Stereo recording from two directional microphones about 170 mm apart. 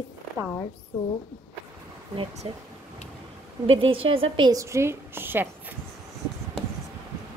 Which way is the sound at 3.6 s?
30° right (ahead or behind).